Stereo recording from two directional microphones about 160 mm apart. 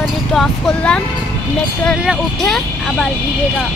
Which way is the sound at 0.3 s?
Centre (ahead or behind).